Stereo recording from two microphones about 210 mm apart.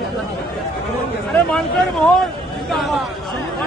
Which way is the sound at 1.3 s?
Centre (ahead or behind).